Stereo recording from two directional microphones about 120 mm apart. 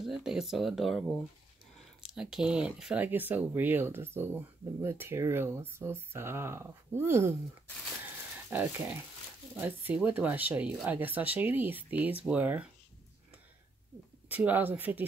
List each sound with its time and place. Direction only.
0.0 s speech: 5° right (ahead or behind); by 7.3 s 20° right (ahead or behind)
8.5 s speech: 15° right (ahead or behind)
14.3 s speech: 15° right (ahead or behind)